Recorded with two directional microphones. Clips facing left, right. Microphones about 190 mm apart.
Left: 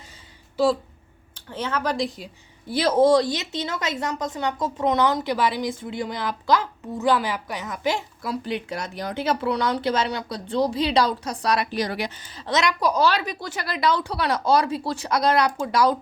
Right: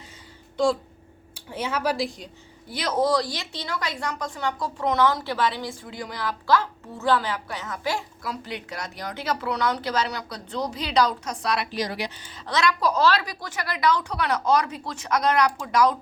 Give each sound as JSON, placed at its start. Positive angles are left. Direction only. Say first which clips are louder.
{"t": 0.5, "sound": "speech", "louder": "left 2 dB", "side_deg": 5}
{"t": 1.4, "sound": "speech", "louder": "left 1 dB", "side_deg": -10}
{"t": 2.6, "sound": "a woman's voice", "louder": "left 6 dB", "side_deg": 30}
{"t": 12.5, "sound": "a woman's voice", "louder": "left 1 dB", "side_deg": 20}
{"t": 13.4, "sound": "speech", "louder": "left 1 dB", "side_deg": 30}